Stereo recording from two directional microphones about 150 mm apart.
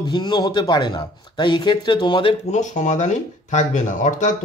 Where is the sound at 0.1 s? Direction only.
30° left (ahead or behind).